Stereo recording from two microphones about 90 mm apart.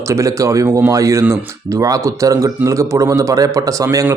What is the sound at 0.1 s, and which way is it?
Speech, 35° right (ahead or behind).